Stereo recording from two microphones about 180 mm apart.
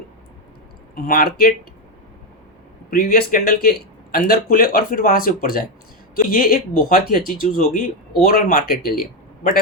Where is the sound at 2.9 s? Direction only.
55° left (ahead or behind).